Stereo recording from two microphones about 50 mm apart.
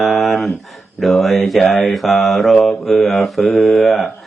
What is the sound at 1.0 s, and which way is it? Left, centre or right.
Mantra, centre.